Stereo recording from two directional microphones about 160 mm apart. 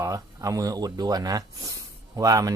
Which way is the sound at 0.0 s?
20° right (ahead or behind).